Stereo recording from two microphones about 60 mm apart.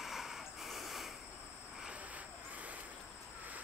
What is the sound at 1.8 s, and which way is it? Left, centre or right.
Vehicle, centre.